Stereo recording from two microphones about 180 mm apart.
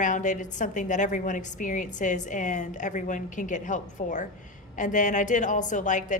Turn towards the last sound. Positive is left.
turn(degrees=45)  # may be behind; listen again after turning